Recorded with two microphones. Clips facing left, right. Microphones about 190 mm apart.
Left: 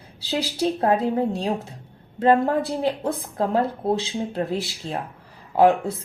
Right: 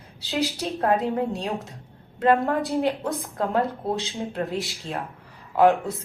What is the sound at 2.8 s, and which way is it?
Speech, 35° left (ahead or behind).